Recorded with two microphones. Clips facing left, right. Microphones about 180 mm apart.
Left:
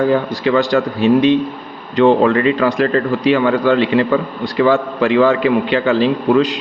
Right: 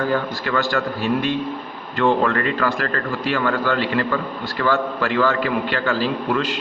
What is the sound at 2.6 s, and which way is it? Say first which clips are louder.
A man's voice: left 8 dB; 15° left (ahead or behind).